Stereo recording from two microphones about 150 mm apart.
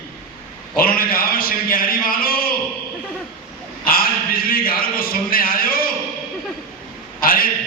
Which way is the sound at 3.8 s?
75° left (ahead or behind).